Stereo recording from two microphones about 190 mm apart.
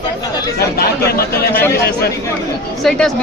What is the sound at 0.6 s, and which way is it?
Speech, 55° left (ahead or behind).